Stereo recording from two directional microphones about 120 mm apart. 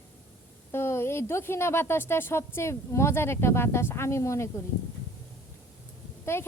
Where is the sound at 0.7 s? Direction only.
20° left (ahead or behind).